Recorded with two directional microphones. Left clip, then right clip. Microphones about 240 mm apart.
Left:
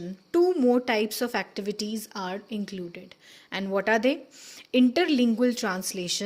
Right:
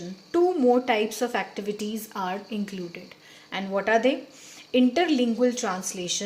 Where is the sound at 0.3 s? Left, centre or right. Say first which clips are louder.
Right 1 dB; left.